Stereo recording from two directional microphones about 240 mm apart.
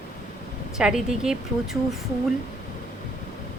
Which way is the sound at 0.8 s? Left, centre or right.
Centre.